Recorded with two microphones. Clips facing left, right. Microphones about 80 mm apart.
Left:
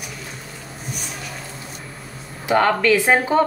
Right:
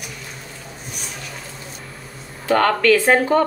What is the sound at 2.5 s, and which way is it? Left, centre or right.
Speech, centre.